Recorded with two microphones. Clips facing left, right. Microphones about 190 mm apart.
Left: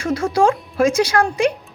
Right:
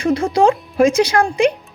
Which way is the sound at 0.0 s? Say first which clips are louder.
Right 2 dB; 20° right (ahead or behind).